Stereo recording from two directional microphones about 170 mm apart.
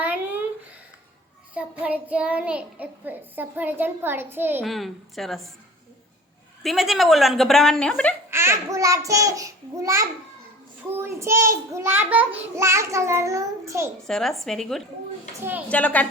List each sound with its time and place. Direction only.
0.0 s a sound: 10° right (ahead or behind)
1.5 s child singing: 10° right (ahead or behind)
4.6 s speech: centre (ahead or behind)
6.6 s speech: centre (ahead or behind)
8.3 s a child's voice: 15° right (ahead or behind)
10.9 s child singing: 15° right (ahead or behind)
14.1 s a woman's voice: centre (ahead or behind)